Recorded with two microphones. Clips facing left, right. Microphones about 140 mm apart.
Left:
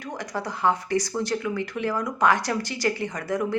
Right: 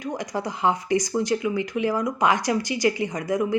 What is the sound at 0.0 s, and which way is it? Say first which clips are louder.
A woman's voice: right 3 dB; 15° right (ahead or behind).